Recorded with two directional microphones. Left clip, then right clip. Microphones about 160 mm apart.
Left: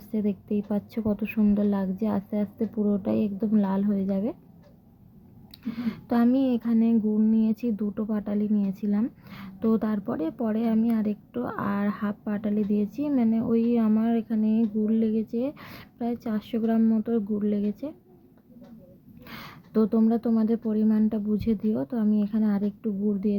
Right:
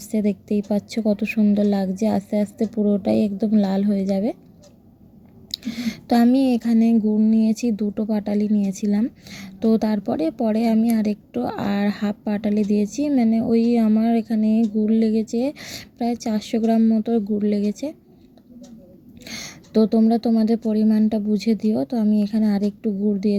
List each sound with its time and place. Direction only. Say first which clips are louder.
0.0 s speech: right 6 dB; 25° right (ahead or behind)
5.5 s speech: right 6 dB; 35° right (ahead or behind)
19.2 s speech: right 8 dB; 25° right (ahead or behind)